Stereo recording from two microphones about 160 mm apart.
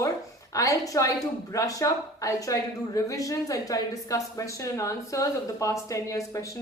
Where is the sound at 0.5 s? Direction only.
20° left (ahead or behind).